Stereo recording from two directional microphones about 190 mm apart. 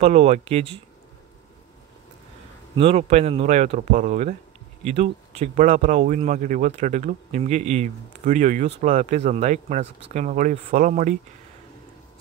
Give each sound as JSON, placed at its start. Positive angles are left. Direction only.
{"t": 0.0, "sound": "speech", "side_deg": -35}
{"t": 2.7, "sound": "speech", "side_deg": -30}